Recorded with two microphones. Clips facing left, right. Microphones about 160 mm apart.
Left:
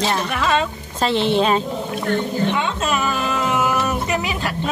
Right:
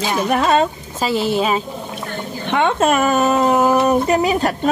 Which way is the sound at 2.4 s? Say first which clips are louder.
Right 5 dB; 55° right (ahead or behind).